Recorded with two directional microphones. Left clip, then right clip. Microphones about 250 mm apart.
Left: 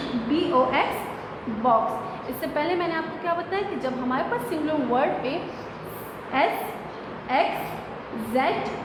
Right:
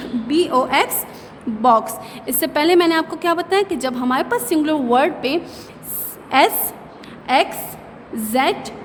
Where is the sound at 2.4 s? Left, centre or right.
Right.